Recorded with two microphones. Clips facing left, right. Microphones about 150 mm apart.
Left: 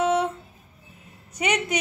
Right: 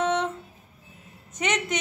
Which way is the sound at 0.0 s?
10° left (ahead or behind).